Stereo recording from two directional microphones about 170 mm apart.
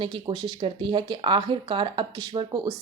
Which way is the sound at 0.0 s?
30° right (ahead or behind).